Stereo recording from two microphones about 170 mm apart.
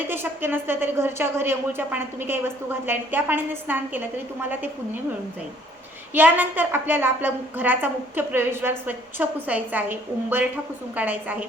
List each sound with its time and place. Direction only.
0.1 s a woman's voice: 10° right (ahead or behind)
6.1 s a woman's voice: 10° right (ahead or behind)